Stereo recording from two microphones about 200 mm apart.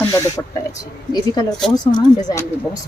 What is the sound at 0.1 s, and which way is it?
Speech, 15° left (ahead or behind).